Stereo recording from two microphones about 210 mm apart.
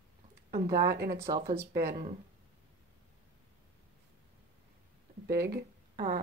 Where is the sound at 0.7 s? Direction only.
45° right (ahead or behind).